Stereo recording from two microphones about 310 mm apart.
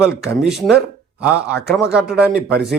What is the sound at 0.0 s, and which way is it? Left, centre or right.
Speech, centre.